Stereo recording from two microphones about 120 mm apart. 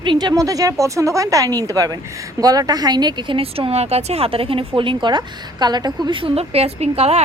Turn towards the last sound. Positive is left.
turn(degrees=-60)  # may be behind; listen again after turning